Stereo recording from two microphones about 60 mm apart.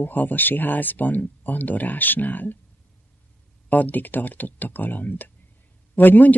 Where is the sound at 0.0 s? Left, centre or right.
Left.